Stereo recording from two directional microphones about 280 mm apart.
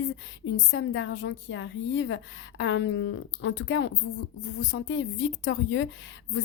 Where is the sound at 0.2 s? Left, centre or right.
Left.